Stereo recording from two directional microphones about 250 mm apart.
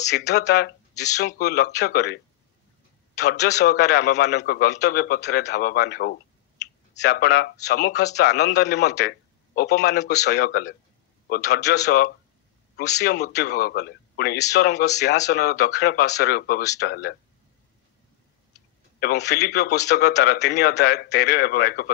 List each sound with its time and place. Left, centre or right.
0.1 s a man's voice: left
3.3 s a man's voice: left
18.9 s speech: left